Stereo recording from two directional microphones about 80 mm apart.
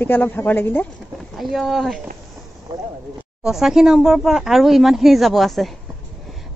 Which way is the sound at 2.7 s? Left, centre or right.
Right.